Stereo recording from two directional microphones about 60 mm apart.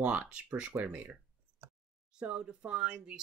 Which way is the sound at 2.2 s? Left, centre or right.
Centre.